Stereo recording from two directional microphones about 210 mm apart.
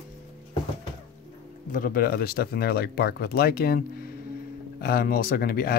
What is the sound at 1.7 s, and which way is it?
Speech, 45° left (ahead or behind).